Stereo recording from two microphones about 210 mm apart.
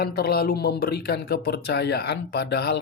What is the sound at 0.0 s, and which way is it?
Speech, 45° left (ahead or behind).